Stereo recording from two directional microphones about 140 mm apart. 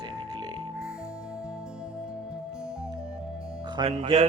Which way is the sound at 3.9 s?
50° right (ahead or behind).